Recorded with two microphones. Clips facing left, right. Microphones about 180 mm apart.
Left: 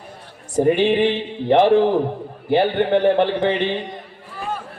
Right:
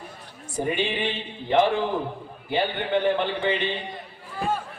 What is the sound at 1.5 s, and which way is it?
A man's voice, 60° left (ahead or behind).